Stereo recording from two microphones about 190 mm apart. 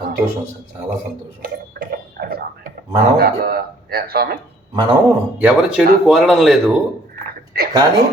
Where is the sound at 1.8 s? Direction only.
55° right (ahead or behind).